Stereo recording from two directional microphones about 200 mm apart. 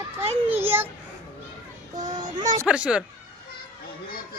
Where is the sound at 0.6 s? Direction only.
10° right (ahead or behind).